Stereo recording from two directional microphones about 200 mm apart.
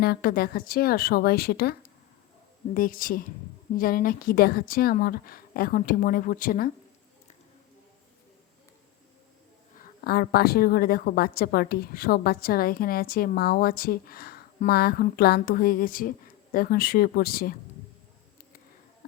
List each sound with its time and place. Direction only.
0.0 s a woman's voice: 50° left (ahead or behind)
9.7 s a woman's voice: 50° left (ahead or behind)